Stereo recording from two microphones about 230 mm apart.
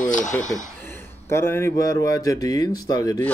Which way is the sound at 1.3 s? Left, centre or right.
Centre.